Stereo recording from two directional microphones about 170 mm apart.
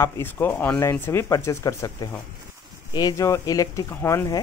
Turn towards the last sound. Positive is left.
turn(degrees=15)  # may be behind; listen again after turning